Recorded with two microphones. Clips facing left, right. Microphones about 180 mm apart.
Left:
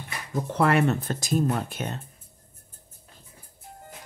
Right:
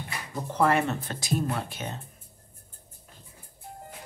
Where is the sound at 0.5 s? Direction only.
65° left (ahead or behind).